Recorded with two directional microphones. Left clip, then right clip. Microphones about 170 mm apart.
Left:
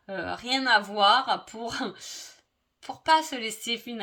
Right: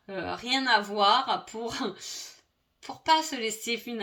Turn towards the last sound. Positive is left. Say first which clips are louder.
# even
turn(degrees=45)  # may be behind; listen again after turning